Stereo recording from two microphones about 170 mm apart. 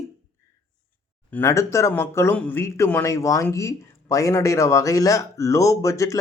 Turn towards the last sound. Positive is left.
turn(degrees=20)  # may be behind; listen again after turning